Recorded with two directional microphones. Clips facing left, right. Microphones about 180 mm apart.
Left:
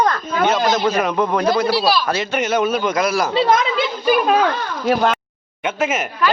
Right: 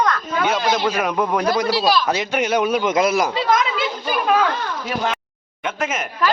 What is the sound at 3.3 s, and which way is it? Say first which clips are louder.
Speech: left 3 dB; 30° left (ahead or behind).